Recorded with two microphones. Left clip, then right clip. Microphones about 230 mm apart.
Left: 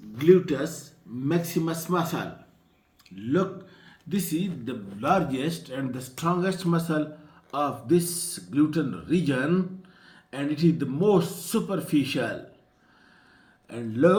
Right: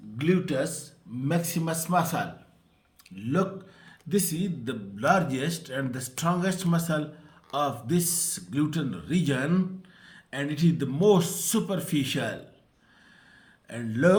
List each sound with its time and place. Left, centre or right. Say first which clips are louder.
0.3 s a man's voice: left 7 dB; right
3.8 s a man's voice: right 4 dB; right
13.7 s a man's voice: left 1 dB; right